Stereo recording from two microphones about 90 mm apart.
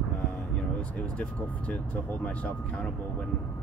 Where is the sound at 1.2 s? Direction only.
15° left (ahead or behind).